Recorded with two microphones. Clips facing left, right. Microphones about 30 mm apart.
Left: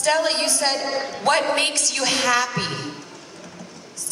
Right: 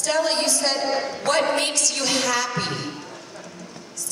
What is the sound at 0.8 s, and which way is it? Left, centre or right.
Speech, centre.